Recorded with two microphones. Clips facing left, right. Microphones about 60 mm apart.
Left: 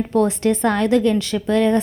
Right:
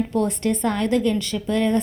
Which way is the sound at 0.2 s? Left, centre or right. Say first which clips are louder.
Left 6 dB; left.